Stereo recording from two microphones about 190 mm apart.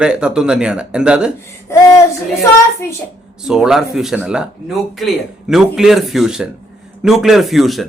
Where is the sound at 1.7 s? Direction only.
15° left (ahead or behind).